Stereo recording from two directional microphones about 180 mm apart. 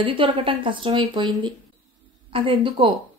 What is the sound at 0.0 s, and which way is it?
Speech, 30° right (ahead or behind).